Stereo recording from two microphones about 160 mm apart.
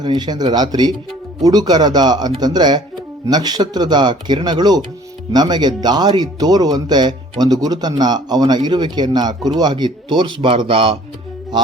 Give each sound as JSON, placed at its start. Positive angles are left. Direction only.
{"t": 0.0, "sound": "speech", "side_deg": -25}